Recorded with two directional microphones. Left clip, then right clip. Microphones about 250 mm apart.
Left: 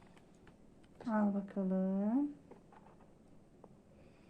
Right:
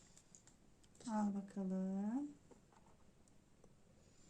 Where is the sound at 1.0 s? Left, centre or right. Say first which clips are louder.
Left 7 dB; centre.